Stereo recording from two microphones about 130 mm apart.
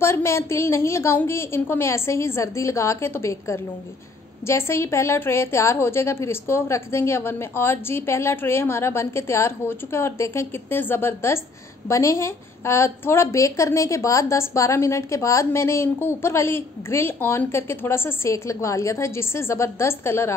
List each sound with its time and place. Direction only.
0.0 s a woman's voice: 20° left (ahead or behind)